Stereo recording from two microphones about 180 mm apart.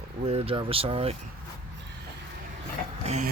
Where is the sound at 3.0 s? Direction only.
40° right (ahead or behind).